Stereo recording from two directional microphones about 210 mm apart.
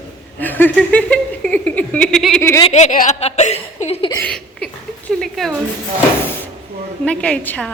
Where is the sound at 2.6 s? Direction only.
30° left (ahead or behind).